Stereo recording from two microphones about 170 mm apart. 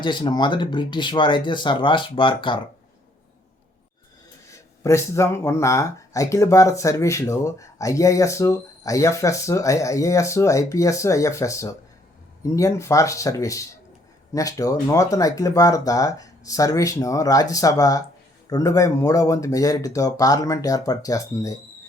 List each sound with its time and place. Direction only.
0.0 s speech: 25° left (ahead or behind)
4.8 s speech: 15° left (ahead or behind)